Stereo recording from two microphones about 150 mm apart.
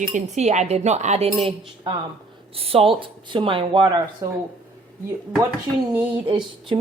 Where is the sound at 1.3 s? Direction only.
40° right (ahead or behind).